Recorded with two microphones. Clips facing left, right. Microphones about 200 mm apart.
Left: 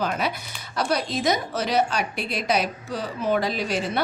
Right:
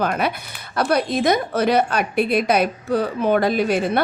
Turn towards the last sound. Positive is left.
turn(degrees=-55)  # may be behind; listen again after turning